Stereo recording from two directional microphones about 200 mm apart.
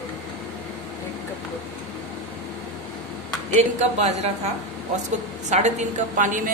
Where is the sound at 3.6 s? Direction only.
35° right (ahead or behind).